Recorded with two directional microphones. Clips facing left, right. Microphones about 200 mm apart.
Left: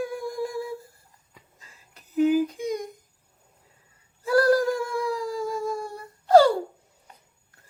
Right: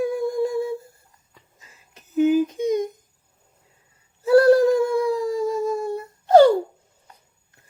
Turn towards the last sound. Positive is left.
turn(degrees=-25)  # may be behind; listen again after turning